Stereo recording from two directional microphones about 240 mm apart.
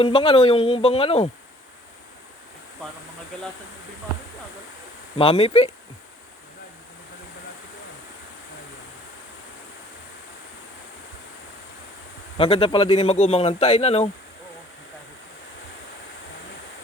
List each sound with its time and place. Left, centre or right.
0.0 s a man's voice: left
5.1 s a man's voice: left
12.4 s a man's voice: left